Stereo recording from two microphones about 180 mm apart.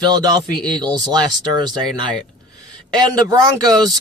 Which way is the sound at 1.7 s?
25° right (ahead or behind).